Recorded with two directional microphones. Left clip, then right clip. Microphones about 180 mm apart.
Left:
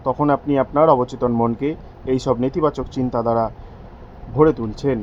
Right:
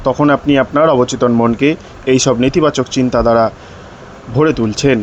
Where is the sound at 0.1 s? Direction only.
20° right (ahead or behind).